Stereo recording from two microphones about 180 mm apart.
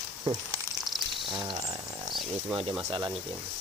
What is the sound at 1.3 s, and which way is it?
Speech, 25° right (ahead or behind).